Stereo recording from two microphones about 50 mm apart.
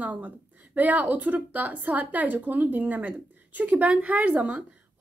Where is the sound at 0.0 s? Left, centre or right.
Right.